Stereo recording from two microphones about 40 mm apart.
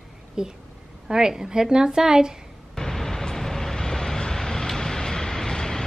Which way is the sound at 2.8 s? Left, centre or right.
Centre.